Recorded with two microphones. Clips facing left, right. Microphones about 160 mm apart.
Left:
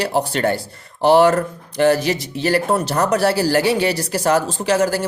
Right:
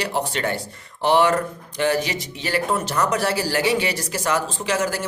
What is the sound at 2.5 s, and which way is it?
A man's voice, 40° left (ahead or behind).